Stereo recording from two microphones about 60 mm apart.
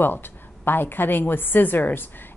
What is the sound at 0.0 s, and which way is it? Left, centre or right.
Speech, left.